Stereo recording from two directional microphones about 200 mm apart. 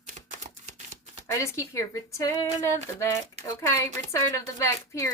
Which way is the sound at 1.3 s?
15° left (ahead or behind).